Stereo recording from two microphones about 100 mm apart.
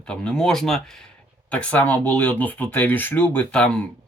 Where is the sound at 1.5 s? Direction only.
15° left (ahead or behind).